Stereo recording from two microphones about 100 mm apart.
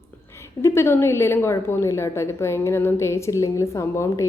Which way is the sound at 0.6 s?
25° left (ahead or behind).